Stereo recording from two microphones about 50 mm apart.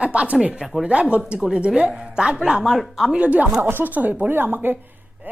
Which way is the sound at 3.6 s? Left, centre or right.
Right.